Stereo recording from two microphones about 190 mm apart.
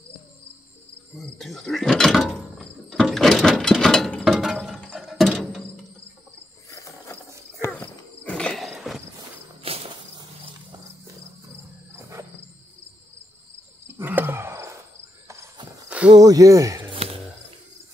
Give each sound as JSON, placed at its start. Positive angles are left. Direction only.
{"t": 1.1, "sound": "a sound", "side_deg": 0}
{"t": 6.7, "sound": "mechanisms", "side_deg": 15}
{"t": 7.6, "sound": "horse", "side_deg": 10}
{"t": 9.6, "sound": "walk", "side_deg": -30}
{"t": 12.0, "sound": "music", "side_deg": -15}
{"t": 13.9, "sound": "a sound", "side_deg": -10}
{"t": 15.2, "sound": "horse", "side_deg": -25}
{"t": 16.1, "sound": "speech", "side_deg": -20}
{"t": 16.9, "sound": "a sound", "side_deg": -30}